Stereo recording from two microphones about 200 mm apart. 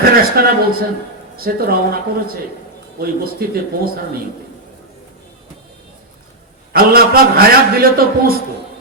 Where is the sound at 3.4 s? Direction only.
50° right (ahead or behind).